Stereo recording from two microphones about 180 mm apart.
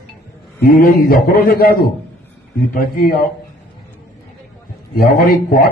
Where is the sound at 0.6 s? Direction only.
55° left (ahead or behind).